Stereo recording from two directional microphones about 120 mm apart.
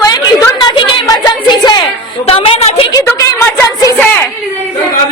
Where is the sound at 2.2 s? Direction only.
55° left (ahead or behind).